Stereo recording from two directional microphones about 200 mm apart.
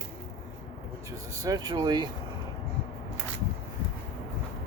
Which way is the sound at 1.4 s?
20° right (ahead or behind).